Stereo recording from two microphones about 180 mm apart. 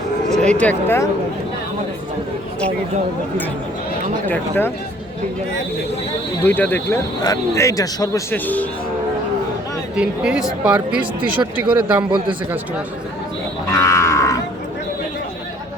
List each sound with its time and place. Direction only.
0.4 s speech: 5° left (ahead or behind)
4.3 s speech: 10° left (ahead or behind)
6.4 s a man's voice: 10° left (ahead or behind)
9.9 s speech: 5° right (ahead or behind)
13.7 s livestock: 20° left (ahead or behind)